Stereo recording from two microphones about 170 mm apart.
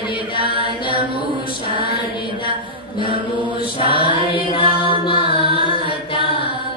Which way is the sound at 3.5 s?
30° left (ahead or behind).